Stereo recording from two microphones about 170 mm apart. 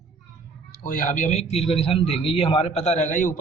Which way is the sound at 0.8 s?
50° left (ahead or behind).